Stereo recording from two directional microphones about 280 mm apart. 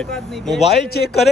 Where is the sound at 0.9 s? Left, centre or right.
Left.